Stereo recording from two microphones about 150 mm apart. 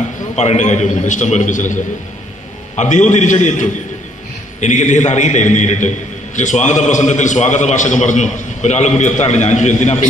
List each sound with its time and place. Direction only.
0.4 s a man's voice: 50° left (ahead or behind)